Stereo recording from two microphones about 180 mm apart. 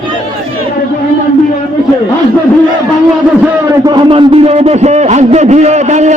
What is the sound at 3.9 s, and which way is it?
A man's voice, 30° right (ahead or behind).